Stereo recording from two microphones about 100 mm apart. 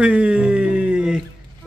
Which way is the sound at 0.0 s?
10° right (ahead or behind).